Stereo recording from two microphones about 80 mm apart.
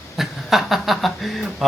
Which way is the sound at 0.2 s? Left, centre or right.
Centre.